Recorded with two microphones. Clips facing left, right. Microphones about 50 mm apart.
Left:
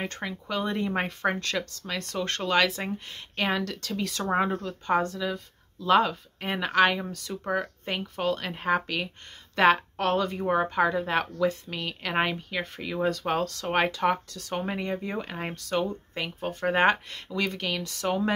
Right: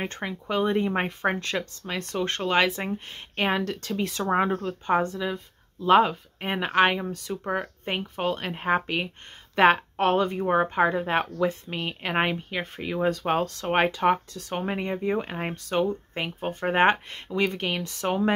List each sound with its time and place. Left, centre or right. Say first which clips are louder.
0.0 s speech: right 2 dB; centre
4.3 s speech: right 2 dB; centre